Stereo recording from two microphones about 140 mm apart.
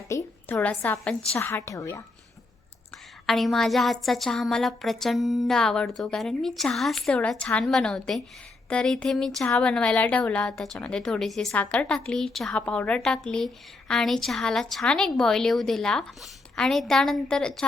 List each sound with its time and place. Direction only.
0.1 s a woman's voice: 15° left (ahead or behind)
3.2 s speech: centre (ahead or behind)